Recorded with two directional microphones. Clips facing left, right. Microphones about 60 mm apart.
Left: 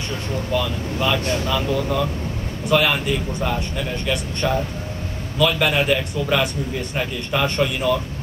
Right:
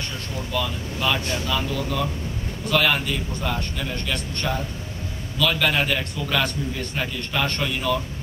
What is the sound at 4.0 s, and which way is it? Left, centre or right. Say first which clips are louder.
A man's voice: left 6 dB; centre.